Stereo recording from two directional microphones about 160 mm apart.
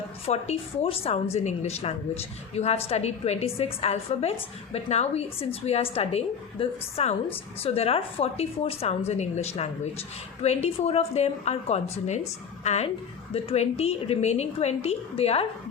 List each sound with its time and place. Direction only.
0.3 s a woman's voice: 40° left (ahead or behind)